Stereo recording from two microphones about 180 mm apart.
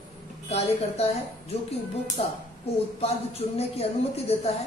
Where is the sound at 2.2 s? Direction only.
30° left (ahead or behind).